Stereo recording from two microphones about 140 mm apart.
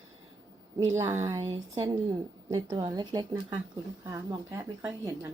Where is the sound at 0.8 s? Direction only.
20° right (ahead or behind).